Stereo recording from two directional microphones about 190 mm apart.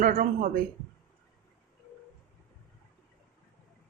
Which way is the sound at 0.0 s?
45° right (ahead or behind).